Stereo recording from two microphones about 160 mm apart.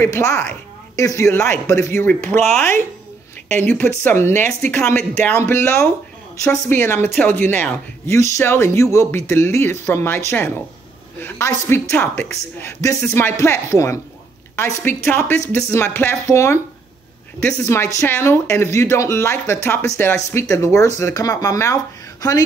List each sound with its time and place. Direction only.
0.0 s speech: 15° left (ahead or behind)
3.6 s speech: 10° left (ahead or behind)
17.6 s speech: 20° left (ahead or behind)